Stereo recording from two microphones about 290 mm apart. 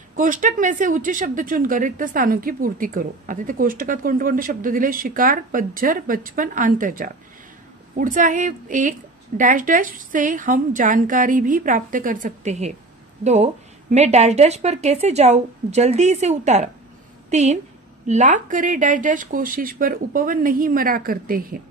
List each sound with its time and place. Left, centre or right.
0.1 s a woman's voice: right